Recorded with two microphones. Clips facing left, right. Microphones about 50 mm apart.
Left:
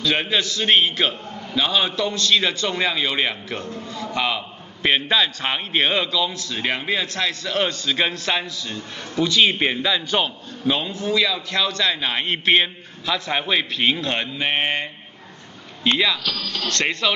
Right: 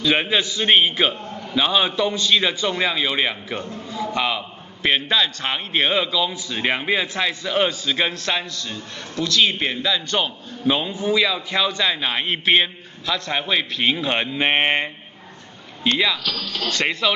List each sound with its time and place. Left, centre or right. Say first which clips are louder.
0.0 s a man's voice: right 2 dB; centre
9.1 s a man's voice: left 2 dB; centre
10.7 s a man's voice: right 2 dB; centre
14.0 s speech: right 3 dB; centre
16.0 s a man's voice: even; centre